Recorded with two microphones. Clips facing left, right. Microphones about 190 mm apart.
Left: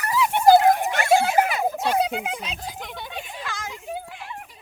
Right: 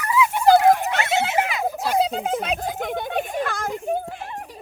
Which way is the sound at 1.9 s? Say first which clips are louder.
Right 3 dB; 35° right (ahead or behind).